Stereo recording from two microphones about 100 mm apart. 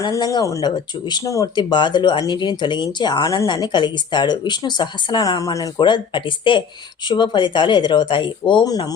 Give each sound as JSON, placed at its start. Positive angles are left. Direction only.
{"t": 0.2, "sound": "speech", "side_deg": 40}
{"t": 1.5, "sound": "speech", "side_deg": 50}
{"t": 5.4, "sound": "speech", "side_deg": 35}
{"t": 5.8, "sound": "speech", "side_deg": 55}
{"t": 8.6, "sound": "speech", "side_deg": 40}